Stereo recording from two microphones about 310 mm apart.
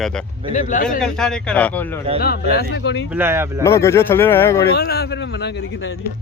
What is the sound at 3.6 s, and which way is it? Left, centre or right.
Speech, centre.